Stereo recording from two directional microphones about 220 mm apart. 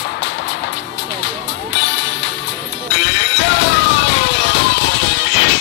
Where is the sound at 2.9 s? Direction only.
55° left (ahead or behind).